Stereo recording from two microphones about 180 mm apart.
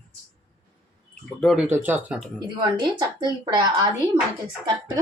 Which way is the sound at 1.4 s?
Centre (ahead or behind).